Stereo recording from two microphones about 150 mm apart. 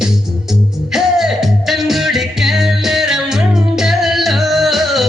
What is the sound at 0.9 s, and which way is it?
Music, centre (ahead or behind).